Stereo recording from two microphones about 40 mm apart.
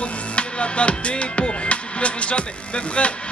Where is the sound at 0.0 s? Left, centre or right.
Left.